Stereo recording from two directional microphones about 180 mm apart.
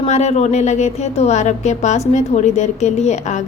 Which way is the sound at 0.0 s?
40° left (ahead or behind).